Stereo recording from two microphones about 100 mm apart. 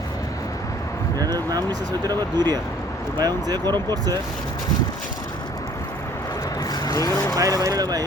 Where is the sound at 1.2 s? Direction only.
40° right (ahead or behind).